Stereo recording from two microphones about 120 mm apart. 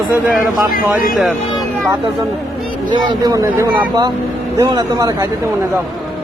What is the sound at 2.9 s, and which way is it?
Speech, 40° right (ahead or behind).